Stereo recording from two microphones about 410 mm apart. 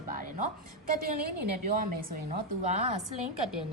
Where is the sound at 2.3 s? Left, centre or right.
Centre.